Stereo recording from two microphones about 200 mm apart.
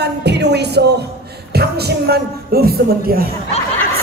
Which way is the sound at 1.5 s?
55° right (ahead or behind).